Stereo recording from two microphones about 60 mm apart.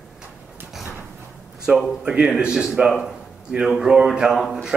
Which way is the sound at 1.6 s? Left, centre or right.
Centre.